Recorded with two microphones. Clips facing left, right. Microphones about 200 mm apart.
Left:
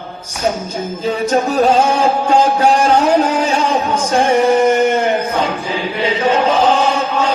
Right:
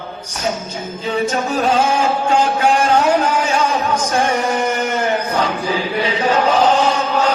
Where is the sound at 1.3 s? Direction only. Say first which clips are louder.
Left 7 dB; 35° left (ahead or behind).